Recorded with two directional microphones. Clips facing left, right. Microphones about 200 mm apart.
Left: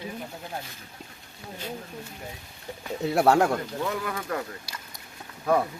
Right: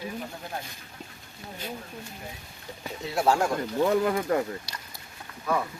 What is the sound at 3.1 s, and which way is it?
Speech, 60° left (ahead or behind).